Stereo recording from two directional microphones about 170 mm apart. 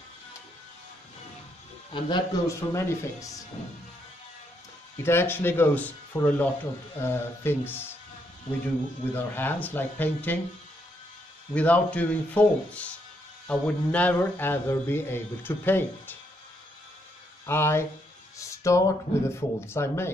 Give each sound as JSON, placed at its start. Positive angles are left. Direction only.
{"t": 1.9, "sound": "speech", "side_deg": 25}
{"t": 4.9, "sound": "speech", "side_deg": 15}
{"t": 9.1, "sound": "speech", "side_deg": 10}
{"t": 11.5, "sound": "speech", "side_deg": 10}
{"t": 17.5, "sound": "speech", "side_deg": 15}